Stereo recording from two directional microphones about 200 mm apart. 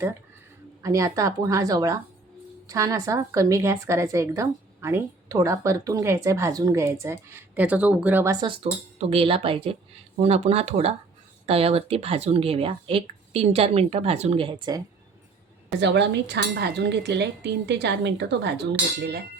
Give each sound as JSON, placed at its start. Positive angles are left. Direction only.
{"t": 0.8, "sound": "a woman's voice", "side_deg": -15}
{"t": 15.8, "sound": "speech", "side_deg": -60}